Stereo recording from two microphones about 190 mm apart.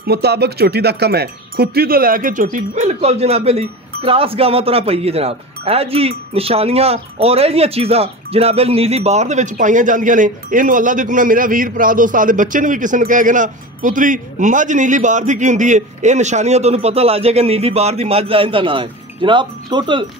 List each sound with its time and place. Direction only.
0.0 s speech: 60° right (ahead or behind); by 20.1 s 25° right (ahead or behind)